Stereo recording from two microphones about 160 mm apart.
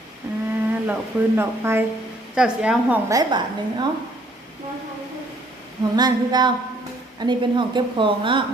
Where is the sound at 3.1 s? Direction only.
25° right (ahead or behind).